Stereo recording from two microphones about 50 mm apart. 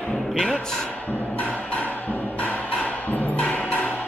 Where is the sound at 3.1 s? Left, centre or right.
Left.